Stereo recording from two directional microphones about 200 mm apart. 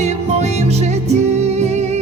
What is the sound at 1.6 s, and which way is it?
Music, 35° right (ahead or behind).